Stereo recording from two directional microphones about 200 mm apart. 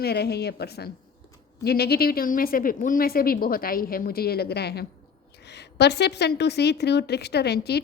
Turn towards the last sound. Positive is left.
turn(degrees=55)  # may be behind; listen again after turning